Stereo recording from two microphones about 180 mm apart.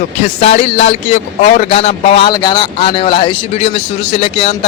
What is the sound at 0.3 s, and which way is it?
Speech, 35° left (ahead or behind).